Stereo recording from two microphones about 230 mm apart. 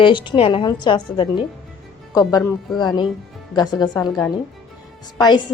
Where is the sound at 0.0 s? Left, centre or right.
Left.